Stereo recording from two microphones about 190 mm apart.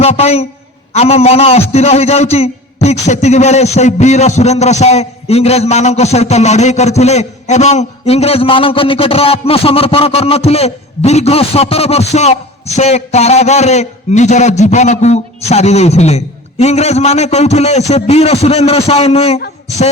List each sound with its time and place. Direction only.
0.0 s a man's voice: 35° left (ahead or behind)